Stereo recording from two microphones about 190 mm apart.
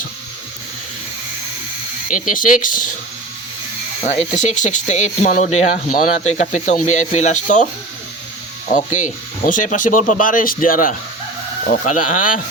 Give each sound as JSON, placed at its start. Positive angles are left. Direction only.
{"t": 2.0, "sound": "speech", "side_deg": 45}
{"t": 4.0, "sound": "speech", "side_deg": 40}
{"t": 9.5, "sound": "speech", "side_deg": 40}